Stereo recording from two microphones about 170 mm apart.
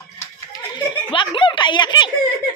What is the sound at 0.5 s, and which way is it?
Giggle, 30° left (ahead or behind).